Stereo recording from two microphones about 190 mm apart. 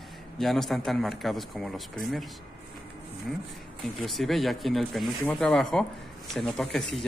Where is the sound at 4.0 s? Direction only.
Centre (ahead or behind).